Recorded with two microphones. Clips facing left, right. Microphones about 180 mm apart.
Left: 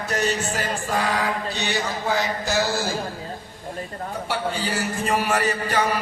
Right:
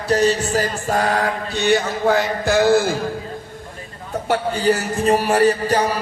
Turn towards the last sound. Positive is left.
turn(degrees=-35)  # may be behind; listen again after turning